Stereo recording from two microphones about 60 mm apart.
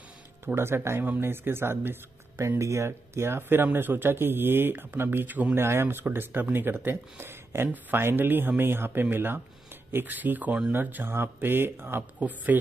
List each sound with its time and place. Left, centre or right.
0.6 s a man's voice: right
2.6 s a man's voice: right
5.6 s a man's voice: right